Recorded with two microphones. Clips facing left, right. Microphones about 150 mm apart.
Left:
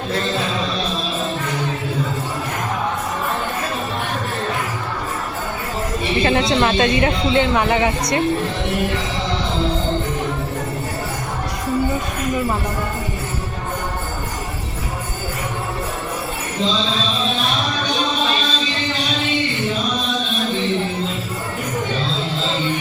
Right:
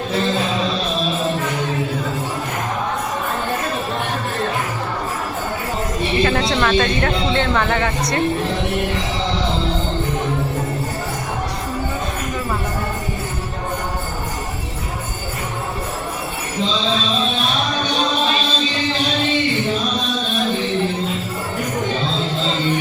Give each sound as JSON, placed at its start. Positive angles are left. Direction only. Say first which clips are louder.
{"t": 6.2, "sound": "a woman's voice", "louder": "left 3 dB", "side_deg": 25}